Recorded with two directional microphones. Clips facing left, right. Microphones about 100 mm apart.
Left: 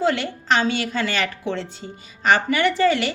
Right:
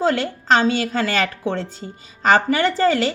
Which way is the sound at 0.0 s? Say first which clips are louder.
Right 2 dB; 40° right (ahead or behind).